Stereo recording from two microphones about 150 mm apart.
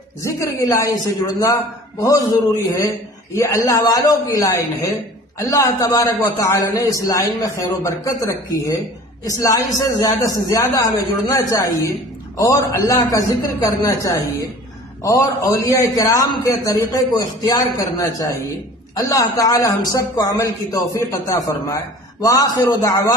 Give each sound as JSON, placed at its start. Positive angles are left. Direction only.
{"t": 0.2, "sound": "a man's voice", "side_deg": 20}